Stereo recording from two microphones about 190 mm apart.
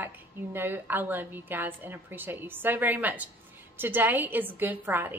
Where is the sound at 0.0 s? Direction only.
10° right (ahead or behind).